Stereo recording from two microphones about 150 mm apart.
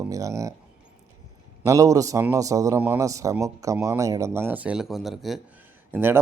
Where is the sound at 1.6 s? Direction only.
20° right (ahead or behind); by 5.4 s centre (ahead or behind).